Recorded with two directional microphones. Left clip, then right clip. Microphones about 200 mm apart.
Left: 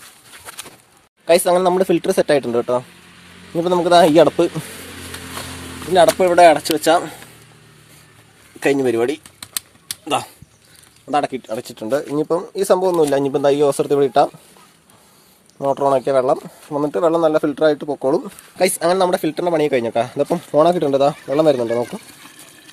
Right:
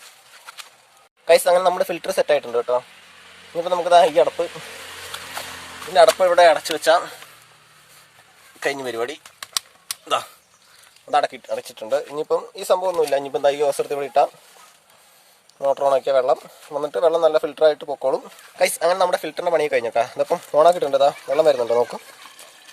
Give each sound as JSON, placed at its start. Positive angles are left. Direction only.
{"t": 1.2, "sound": "speech", "side_deg": 0}
{"t": 2.2, "sound": "speech", "side_deg": 15}
{"t": 4.1, "sound": "speech", "side_deg": 35}
{"t": 5.9, "sound": "speech", "side_deg": 0}
{"t": 8.6, "sound": "speech", "side_deg": 5}
{"t": 11.1, "sound": "speech", "side_deg": 0}
{"t": 15.5, "sound": "speech", "side_deg": 0}
{"t": 22.2, "sound": "water", "side_deg": 10}